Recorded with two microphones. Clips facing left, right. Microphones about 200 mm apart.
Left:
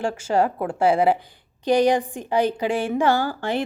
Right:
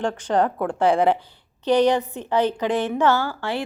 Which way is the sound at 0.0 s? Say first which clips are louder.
Even; 10° left (ahead or behind).